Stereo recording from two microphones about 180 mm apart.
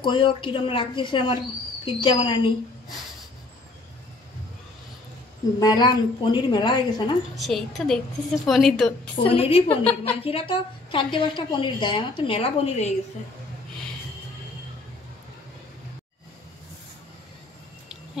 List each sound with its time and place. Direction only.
0.0 s a woman's voice: 25° left (ahead or behind)
5.6 s a woman's voice: 25° left (ahead or behind)
7.3 s a woman's voice: centre (ahead or behind)
9.2 s a woman's voice: 30° left (ahead or behind)